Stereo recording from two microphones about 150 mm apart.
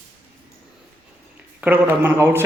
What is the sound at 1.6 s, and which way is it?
Speech, 15° right (ahead or behind).